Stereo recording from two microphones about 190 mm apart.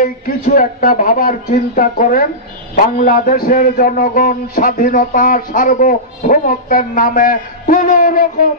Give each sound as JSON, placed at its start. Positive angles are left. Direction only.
{"t": 0.0, "sound": "a man's voice", "side_deg": 45}